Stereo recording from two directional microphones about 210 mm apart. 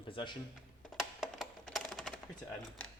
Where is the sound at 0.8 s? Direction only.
Centre (ahead or behind).